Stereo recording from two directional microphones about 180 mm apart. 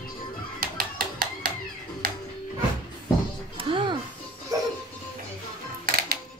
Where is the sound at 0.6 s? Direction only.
55° right (ahead or behind).